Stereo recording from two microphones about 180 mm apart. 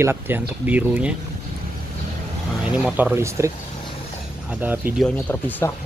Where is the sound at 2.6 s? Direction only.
5° right (ahead or behind).